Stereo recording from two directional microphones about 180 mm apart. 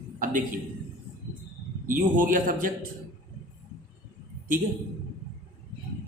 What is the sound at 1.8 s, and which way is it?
Speech, 50° right (ahead or behind).